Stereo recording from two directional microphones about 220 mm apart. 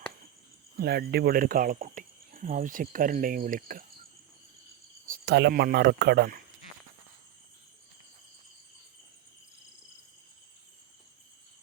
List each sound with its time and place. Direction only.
0.8 s speech: 45° right (ahead or behind)
5.0 s speech: 45° right (ahead or behind)